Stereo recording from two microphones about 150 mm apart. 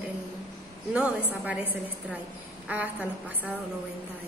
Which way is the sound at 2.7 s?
10° right (ahead or behind).